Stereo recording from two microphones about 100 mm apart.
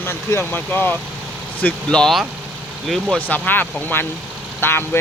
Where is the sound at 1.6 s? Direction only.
5° left (ahead or behind).